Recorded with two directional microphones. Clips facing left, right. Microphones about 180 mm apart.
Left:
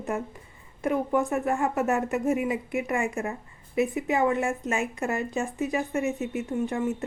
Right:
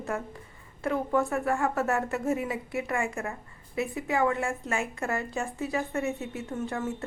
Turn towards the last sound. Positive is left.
turn(degrees=15)  # may be behind; listen again after turning